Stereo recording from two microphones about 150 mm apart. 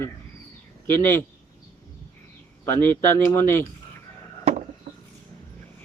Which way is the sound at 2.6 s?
15° left (ahead or behind).